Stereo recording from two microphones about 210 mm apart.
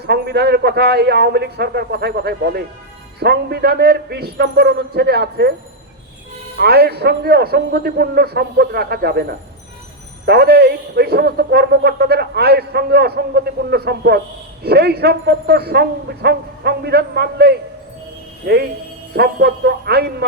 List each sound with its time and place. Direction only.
0.0 s a man's voice: 50° right (ahead or behind)
6.6 s a man's voice: 50° right (ahead or behind)